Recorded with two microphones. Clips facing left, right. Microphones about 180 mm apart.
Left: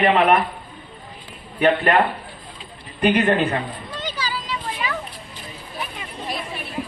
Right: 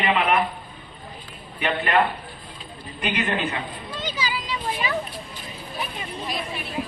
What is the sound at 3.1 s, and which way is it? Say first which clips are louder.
Speech: left 8 dB; 55° left (ahead or behind).